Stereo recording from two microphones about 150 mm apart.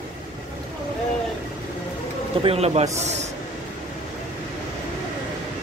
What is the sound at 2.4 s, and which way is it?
Speech, 40° right (ahead or behind).